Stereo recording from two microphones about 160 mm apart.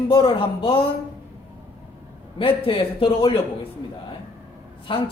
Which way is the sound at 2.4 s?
35° left (ahead or behind).